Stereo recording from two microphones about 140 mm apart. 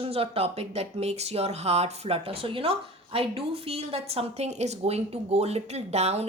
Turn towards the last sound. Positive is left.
turn(degrees=-50)  # may be behind; listen again after turning